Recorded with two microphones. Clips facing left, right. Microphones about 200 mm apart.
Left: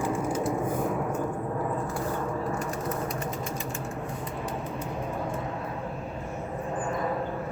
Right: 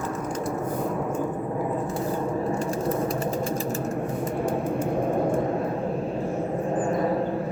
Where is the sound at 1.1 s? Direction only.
15° right (ahead or behind); by 4.3 s 40° right (ahead or behind).